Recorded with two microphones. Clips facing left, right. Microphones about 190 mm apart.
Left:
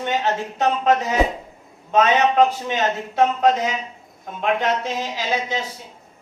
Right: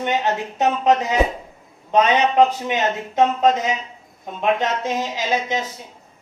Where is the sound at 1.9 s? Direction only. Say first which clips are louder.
Even; 15° right (ahead or behind).